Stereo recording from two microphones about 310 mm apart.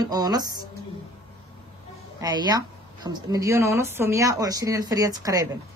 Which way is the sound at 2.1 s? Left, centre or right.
Centre.